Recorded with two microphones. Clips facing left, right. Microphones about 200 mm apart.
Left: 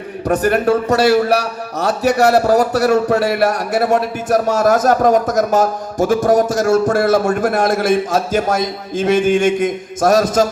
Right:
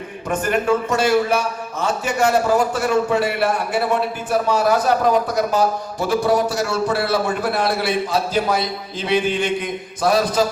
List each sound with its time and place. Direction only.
0.3 s a man's voice: 40° left (ahead or behind)